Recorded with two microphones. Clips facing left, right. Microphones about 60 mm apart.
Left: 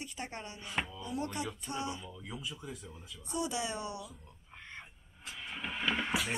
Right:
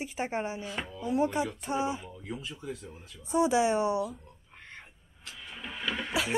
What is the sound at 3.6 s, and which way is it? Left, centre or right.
Speech, right.